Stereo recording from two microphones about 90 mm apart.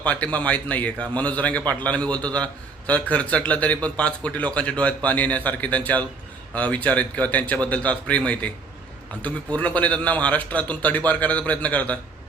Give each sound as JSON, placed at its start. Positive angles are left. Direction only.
{"t": 0.0, "sound": "a man's voice", "side_deg": 15}